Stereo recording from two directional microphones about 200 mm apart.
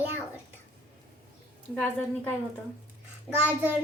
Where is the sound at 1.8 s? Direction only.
10° left (ahead or behind).